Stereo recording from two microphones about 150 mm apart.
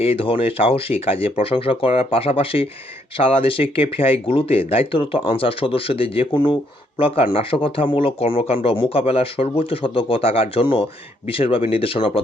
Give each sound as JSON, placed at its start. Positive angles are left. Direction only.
{"t": 0.0, "sound": "speech", "side_deg": 40}